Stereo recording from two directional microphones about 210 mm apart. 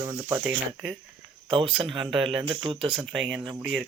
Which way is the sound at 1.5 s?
25° right (ahead or behind).